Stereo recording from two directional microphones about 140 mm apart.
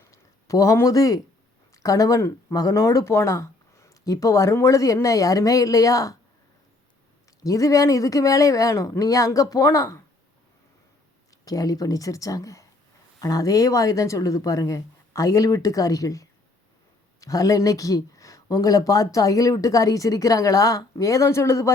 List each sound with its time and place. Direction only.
0.0 s a sound: 20° left (ahead or behind)
1.7 s speech: 25° left (ahead or behind)
7.4 s speech: 25° left (ahead or behind)
11.4 s speech: 25° left (ahead or behind)